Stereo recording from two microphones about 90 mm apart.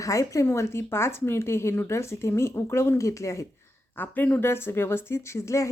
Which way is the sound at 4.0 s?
20° left (ahead or behind).